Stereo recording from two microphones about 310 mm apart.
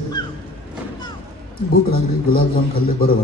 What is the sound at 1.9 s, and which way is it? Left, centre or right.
A man's voice, left.